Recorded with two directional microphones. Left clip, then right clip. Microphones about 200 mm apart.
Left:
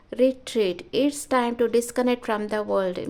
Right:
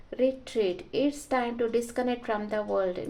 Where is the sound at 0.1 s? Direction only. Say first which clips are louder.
Left 5 dB; 45° left (ahead or behind).